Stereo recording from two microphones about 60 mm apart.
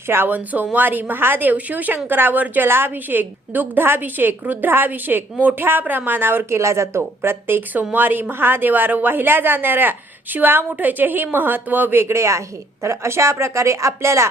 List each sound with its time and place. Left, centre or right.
0.1 s a woman's voice: right
0.3 s a woman's voice: right